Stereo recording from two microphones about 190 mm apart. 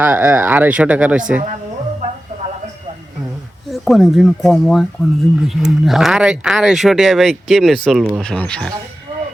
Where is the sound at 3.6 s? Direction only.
Centre (ahead or behind).